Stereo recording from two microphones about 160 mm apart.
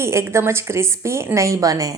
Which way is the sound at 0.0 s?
15° right (ahead or behind).